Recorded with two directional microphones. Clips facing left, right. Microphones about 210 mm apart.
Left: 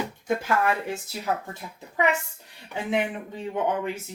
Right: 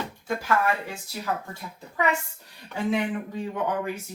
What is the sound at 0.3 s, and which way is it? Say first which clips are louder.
Speech: left 1 dB; 20° left (ahead or behind).